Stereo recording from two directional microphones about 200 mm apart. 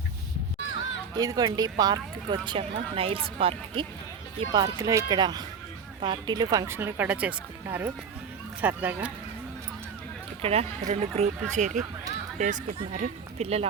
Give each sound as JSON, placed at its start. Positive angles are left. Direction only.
{"t": 1.1, "sound": "speech", "side_deg": -20}
{"t": 10.4, "sound": "speech", "side_deg": -30}